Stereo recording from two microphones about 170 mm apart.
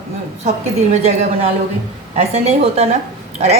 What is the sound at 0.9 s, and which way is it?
A woman's voice, 40° right (ahead or behind).